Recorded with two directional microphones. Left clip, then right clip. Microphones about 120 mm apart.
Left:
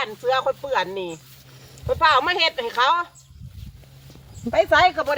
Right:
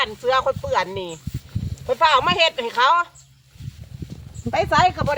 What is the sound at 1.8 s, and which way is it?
Speech, 55° right (ahead or behind).